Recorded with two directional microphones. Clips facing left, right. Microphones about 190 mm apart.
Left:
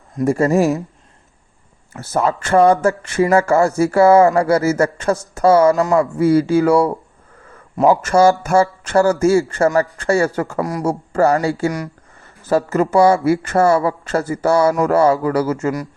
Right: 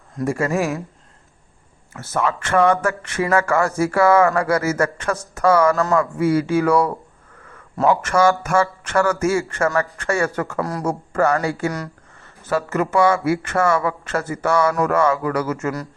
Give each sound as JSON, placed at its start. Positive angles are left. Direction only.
{"t": 0.3, "sound": "speech", "side_deg": 35}
{"t": 2.0, "sound": "speech", "side_deg": 35}
{"t": 5.7, "sound": "speech", "side_deg": 15}
{"t": 6.0, "sound": "speech", "side_deg": 35}
{"t": 8.0, "sound": "speech", "side_deg": 30}
{"t": 10.6, "sound": "speech", "side_deg": 15}
{"t": 10.8, "sound": "speech", "side_deg": 30}